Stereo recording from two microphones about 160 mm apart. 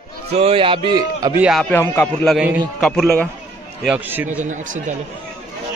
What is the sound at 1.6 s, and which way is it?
Speech, 15° left (ahead or behind).